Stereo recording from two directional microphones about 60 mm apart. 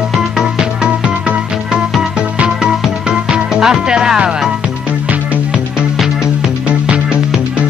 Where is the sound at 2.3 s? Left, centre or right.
Centre.